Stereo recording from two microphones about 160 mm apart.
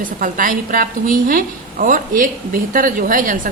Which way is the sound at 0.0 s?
60° right (ahead or behind).